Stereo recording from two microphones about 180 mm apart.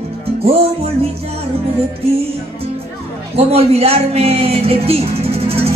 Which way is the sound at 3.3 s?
35° right (ahead or behind).